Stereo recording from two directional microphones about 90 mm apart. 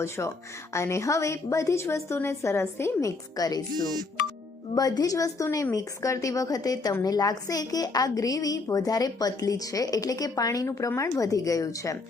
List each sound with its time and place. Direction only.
0.0 s a woman's voice: 30° left (ahead or behind)
3.3 s speech: 45° left (ahead or behind)
4.7 s a woman's voice: 45° left (ahead or behind)